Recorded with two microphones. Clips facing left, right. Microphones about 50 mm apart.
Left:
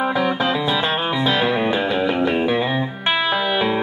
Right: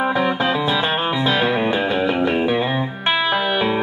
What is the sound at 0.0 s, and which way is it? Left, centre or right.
Music, centre.